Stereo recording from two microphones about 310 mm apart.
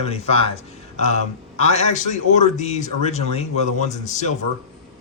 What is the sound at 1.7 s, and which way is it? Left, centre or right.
Speech, left.